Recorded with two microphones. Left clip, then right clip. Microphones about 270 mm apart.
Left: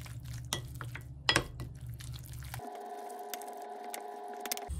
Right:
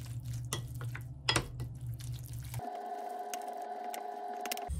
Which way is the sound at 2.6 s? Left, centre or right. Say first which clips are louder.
Right 4 dB; centre.